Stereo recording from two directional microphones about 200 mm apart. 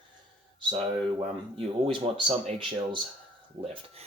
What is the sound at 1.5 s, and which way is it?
Speech, 25° right (ahead or behind).